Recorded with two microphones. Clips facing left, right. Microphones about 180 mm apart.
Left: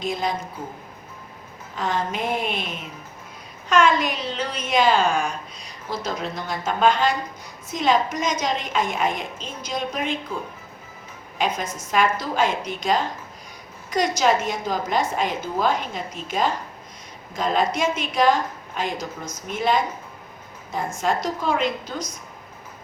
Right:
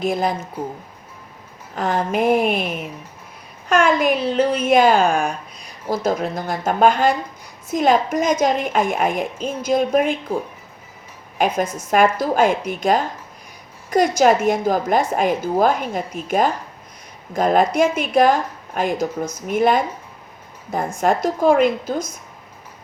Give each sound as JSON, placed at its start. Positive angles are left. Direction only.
{"t": 0.0, "sound": "a woman's voice", "side_deg": -55}
{"t": 1.7, "sound": "a woman's voice", "side_deg": -55}
{"t": 3.7, "sound": "a woman's voice", "side_deg": -55}
{"t": 11.3, "sound": "a woman's voice", "side_deg": -55}